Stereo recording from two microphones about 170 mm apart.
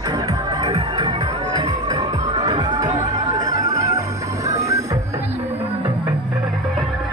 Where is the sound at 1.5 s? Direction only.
20° right (ahead or behind).